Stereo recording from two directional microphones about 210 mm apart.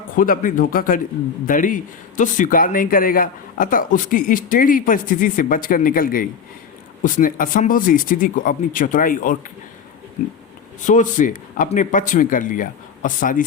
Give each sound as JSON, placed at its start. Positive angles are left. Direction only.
{"t": 0.2, "sound": "a man's voice", "side_deg": 40}
{"t": 10.8, "sound": "a man's voice", "side_deg": 35}